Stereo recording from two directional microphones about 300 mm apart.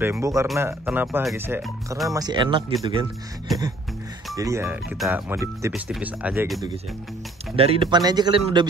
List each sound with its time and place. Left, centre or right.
0.0 s speech: centre
4.4 s speech: centre